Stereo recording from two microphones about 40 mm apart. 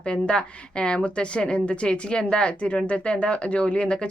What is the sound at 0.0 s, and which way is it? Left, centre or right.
A woman's voice, left.